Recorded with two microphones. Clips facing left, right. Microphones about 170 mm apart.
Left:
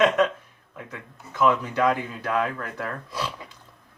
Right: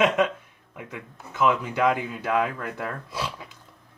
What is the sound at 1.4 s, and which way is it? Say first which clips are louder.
Speech: left 1 dB; 15° right (ahead or behind).